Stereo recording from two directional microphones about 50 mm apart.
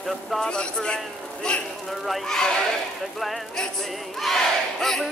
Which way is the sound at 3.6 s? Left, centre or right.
Centre.